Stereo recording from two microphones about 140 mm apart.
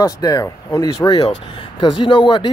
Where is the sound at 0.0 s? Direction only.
25° left (ahead or behind).